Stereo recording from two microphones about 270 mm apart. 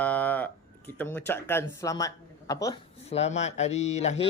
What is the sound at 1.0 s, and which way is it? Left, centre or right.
Speech, centre.